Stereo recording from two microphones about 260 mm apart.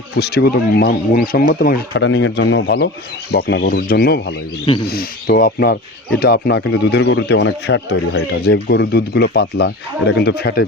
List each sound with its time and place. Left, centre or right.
0.2 s speech: left